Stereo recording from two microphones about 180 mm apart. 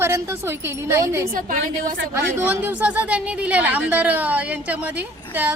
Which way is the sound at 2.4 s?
10° right (ahead or behind).